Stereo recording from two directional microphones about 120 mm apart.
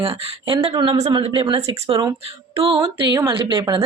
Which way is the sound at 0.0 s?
50° right (ahead or behind).